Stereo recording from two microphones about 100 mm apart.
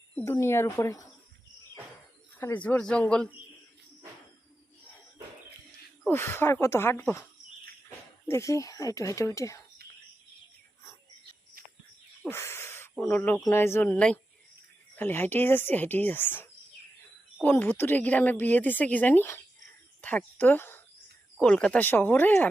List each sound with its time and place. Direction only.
0.3 s speech: 25° left (ahead or behind)
2.4 s a woman's voice: 15° left (ahead or behind)
6.1 s speech: 25° left (ahead or behind)
8.3 s a woman's voice: 30° left (ahead or behind)
12.3 s a sound: 25° left (ahead or behind)
13.1 s speech: 20° left (ahead or behind)
13.8 s a woman's voice: 10° left (ahead or behind)
14.9 s a woman's voice: 20° left (ahead or behind)
21.4 s a woman's voice: 10° left (ahead or behind)
21.8 s speech: 20° left (ahead or behind)